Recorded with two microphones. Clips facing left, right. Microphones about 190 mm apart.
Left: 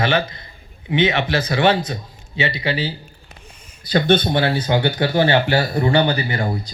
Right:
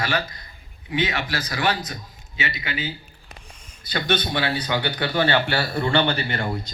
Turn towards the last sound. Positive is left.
turn(degrees=15)  # may be behind; listen again after turning